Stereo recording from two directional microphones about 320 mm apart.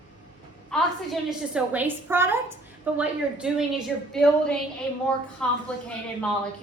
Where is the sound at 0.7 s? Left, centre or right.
Centre.